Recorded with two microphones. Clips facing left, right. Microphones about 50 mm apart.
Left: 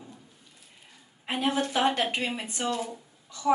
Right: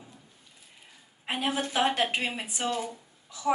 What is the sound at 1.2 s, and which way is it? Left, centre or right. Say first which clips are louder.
A woman's voice: left 2 dB; centre.